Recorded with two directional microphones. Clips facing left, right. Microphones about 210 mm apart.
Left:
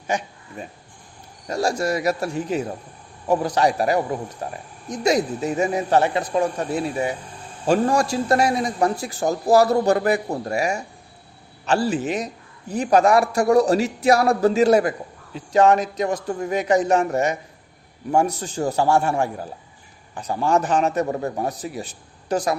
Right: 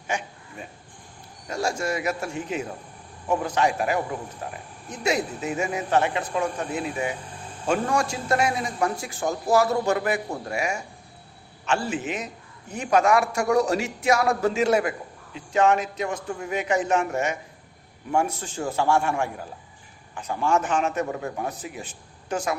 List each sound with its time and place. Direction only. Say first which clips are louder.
0.1 s a man's voice: left 5 dB; 35° left (ahead or behind)
1.5 s a man's voice: left 4 dB; 35° left (ahead or behind)